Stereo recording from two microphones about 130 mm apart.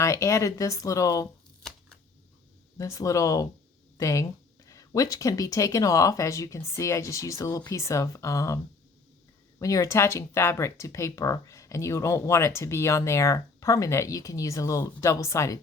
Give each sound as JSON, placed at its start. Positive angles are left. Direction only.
{"t": 0.0, "sound": "speech", "side_deg": 25}
{"t": 2.7, "sound": "speech", "side_deg": 25}
{"t": 9.6, "sound": "speech", "side_deg": 25}